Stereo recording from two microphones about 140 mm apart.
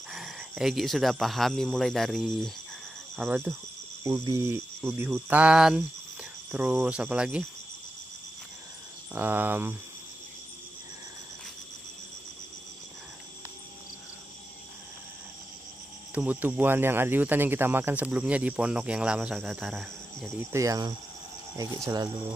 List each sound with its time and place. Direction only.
0.1 s speech: centre (ahead or behind)
3.3 s speech: 15° right (ahead or behind)
9.1 s speech: 15° right (ahead or behind)
16.2 s speech: 15° right (ahead or behind)
20.5 s speech: 25° right (ahead or behind)